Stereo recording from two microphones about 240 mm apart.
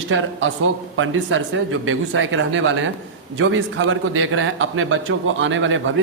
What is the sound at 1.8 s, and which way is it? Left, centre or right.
A man's voice, right.